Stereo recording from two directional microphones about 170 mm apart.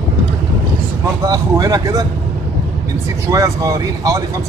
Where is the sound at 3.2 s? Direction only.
20° right (ahead or behind).